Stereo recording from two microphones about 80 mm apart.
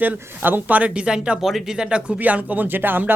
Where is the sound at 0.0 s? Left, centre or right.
Right.